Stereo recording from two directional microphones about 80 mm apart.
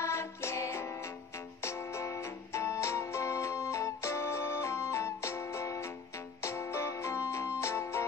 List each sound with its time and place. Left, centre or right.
0.0 s music: left